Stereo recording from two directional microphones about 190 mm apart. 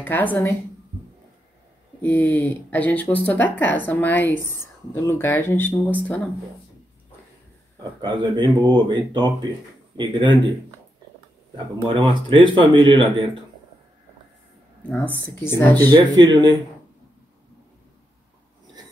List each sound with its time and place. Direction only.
0.0 s speech: 10° left (ahead or behind)
2.0 s speech: 10° left (ahead or behind)
8.0 s speech: 25° right (ahead or behind)
11.9 s speech: 25° right (ahead or behind)
14.8 s speech: 5° left (ahead or behind)
15.9 s speech: 25° right (ahead or behind)